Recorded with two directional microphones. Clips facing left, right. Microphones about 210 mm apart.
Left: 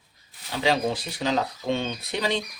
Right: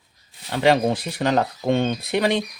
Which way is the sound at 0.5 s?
55° right (ahead or behind).